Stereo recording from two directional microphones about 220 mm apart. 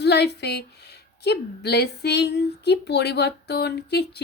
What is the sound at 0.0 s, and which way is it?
A woman's voice, 50° left (ahead or behind).